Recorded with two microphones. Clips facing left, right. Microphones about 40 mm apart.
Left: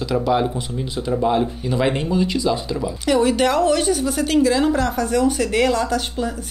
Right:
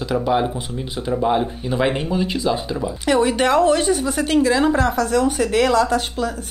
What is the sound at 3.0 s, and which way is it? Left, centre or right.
A woman's voice, right.